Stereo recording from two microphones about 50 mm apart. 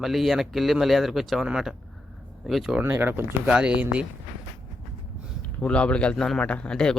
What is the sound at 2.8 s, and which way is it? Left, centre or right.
Speech, right.